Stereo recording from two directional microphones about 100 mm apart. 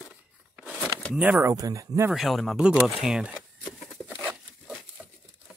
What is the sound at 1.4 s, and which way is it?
Speech, 35° right (ahead or behind).